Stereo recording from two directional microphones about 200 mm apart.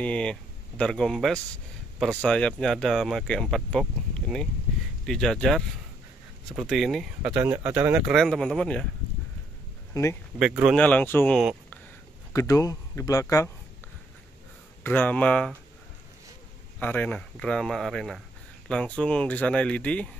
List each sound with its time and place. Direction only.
0.0 s speech: 5° left (ahead or behind)
10.4 s speech: 5° right (ahead or behind)
10.8 s speech: 5° left (ahead or behind)
14.8 s speech: 10° left (ahead or behind)
16.8 s speech: 10° left (ahead or behind)